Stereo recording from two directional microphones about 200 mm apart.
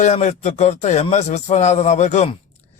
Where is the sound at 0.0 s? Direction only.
35° left (ahead or behind).